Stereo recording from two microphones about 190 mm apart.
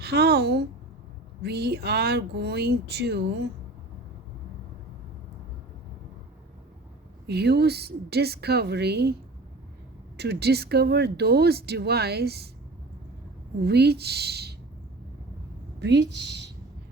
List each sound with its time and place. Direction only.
0.0 s speech: 60° right (ahead or behind)
7.3 s speech: 60° right (ahead or behind)
10.2 s speech: 60° right (ahead or behind)
13.7 s speech: 60° right (ahead or behind)
15.8 s speech: 65° right (ahead or behind)